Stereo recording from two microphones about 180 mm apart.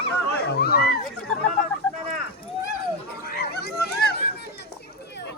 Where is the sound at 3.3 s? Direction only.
60° left (ahead or behind).